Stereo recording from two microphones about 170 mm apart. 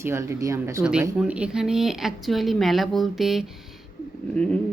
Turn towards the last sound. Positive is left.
turn(degrees=5)  # may be behind; listen again after turning